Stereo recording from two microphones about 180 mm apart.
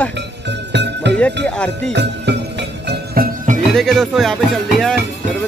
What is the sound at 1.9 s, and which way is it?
Music, 70° right (ahead or behind).